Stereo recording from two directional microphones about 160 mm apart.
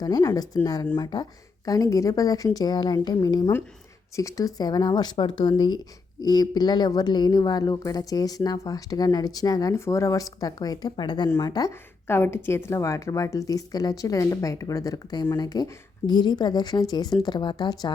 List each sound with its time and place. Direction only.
0.0 s speech: 25° left (ahead or behind)